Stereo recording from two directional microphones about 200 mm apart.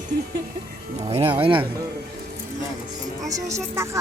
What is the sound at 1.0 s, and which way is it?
Speech, 30° right (ahead or behind).